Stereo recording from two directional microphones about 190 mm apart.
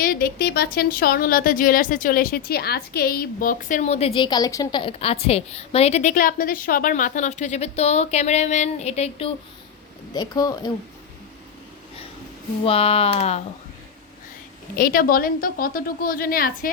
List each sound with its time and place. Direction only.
0.0 s speech: 50° left (ahead or behind); by 9.3 s 30° left (ahead or behind)
10.2 s speech: 20° left (ahead or behind)
12.6 s speech: 30° left (ahead or behind)
14.8 s speech: 50° left (ahead or behind)